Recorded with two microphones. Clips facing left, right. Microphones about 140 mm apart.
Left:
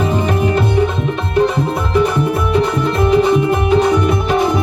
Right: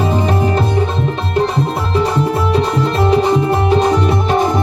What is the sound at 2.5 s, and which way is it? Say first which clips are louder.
Music: even; 30° right (ahead or behind).